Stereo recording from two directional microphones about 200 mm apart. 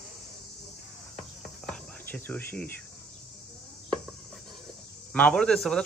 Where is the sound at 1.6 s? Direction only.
5° left (ahead or behind).